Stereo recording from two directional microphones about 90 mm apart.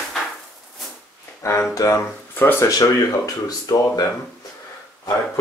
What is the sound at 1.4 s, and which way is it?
Speech, 30° left (ahead or behind).